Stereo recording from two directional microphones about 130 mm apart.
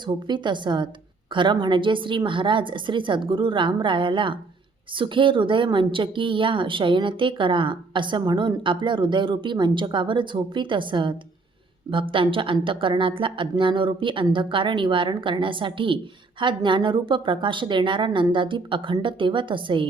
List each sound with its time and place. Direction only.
0.0 s a woman's voice: 35° right (ahead or behind)